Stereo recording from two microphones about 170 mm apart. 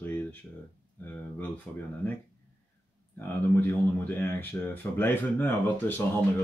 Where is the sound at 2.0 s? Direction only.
15° left (ahead or behind).